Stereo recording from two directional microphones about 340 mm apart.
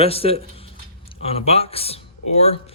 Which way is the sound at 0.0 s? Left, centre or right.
Centre.